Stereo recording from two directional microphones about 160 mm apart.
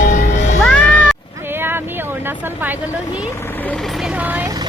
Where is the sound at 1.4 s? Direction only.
15° right (ahead or behind).